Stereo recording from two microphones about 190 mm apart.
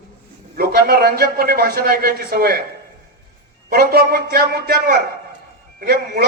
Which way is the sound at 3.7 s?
55° right (ahead or behind).